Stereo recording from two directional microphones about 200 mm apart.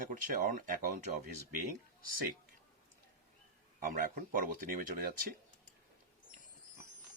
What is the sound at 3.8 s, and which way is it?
Speech, 45° right (ahead or behind).